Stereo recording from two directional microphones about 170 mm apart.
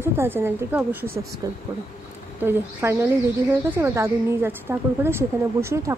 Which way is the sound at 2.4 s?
15° right (ahead or behind).